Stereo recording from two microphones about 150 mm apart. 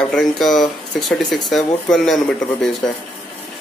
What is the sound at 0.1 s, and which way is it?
Speech, centre (ahead or behind).